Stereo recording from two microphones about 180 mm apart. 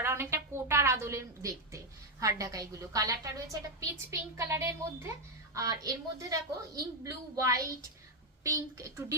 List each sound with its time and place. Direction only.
0.0 s a woman's voice: 15° right (ahead or behind)